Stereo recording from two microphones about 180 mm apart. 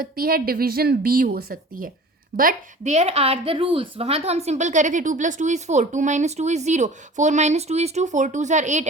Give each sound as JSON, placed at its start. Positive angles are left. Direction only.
{"t": 0.0, "sound": "a woman's voice", "side_deg": -55}